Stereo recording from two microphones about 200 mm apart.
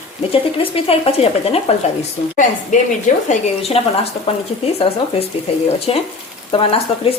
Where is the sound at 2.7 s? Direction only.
40° left (ahead or behind).